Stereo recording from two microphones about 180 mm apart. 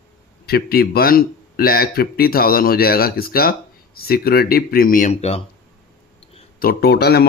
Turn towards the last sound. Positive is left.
turn(degrees=60)  # may be behind; listen again after turning